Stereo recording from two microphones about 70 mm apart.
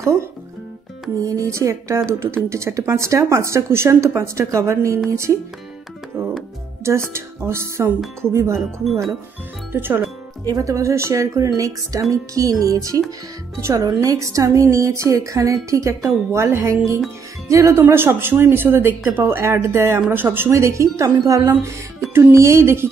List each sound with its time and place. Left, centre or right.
1.2 s speech: right
6.1 s music: right
6.8 s speech: right
9.7 s speech: right
10.6 s speech: right
17.5 s speech: right
17.7 s speech: right
20.5 s speech: right